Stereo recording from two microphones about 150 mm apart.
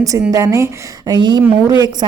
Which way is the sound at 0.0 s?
20° right (ahead or behind).